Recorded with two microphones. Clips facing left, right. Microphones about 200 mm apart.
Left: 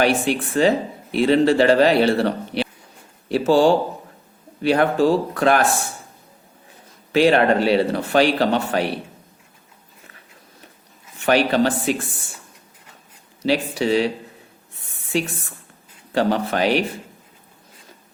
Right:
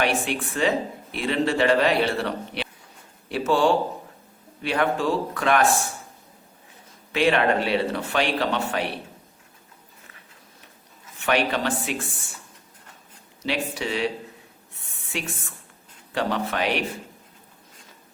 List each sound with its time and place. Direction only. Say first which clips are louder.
0.0 s speech: left 6 dB; 35° left (ahead or behind)
7.1 s speech: left 5 dB; 35° left (ahead or behind)
11.3 s speech: left 6 dB; 35° left (ahead or behind)
13.4 s speech: left 7 dB; 35° left (ahead or behind)
16.1 s speech: left 6 dB; 35° left (ahead or behind)